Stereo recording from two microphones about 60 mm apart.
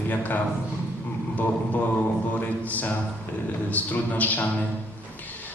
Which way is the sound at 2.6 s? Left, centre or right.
Left.